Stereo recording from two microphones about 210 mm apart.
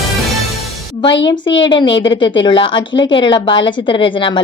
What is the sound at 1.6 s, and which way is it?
Speech, 20° left (ahead or behind).